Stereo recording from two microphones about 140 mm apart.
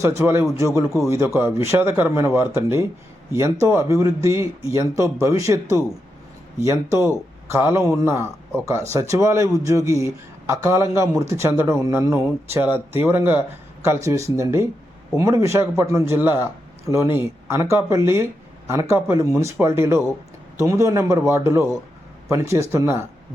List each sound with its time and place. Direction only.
0.0 s speech: 20° right (ahead or behind)